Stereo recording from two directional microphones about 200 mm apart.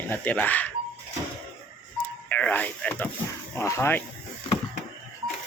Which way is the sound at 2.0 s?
5° left (ahead or behind).